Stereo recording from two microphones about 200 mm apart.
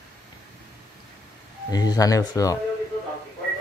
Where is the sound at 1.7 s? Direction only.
20° left (ahead or behind).